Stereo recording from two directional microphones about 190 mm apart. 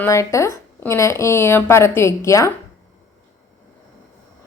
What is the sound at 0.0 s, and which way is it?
Speech, 15° left (ahead or behind).